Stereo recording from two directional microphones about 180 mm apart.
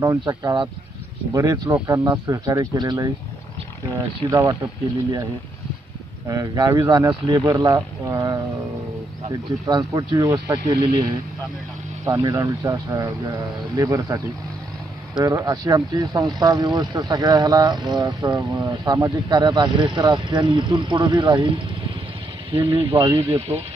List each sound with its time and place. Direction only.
0.0 s speech: 20° right (ahead or behind)
4.3 s speech: 15° right (ahead or behind)
6.2 s speech: 20° right (ahead or behind)
9.7 s speech: 20° right (ahead or behind)
23.1 s speech: 15° right (ahead or behind)